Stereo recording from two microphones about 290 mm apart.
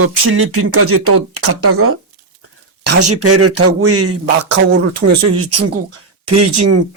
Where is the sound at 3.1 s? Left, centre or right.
Right.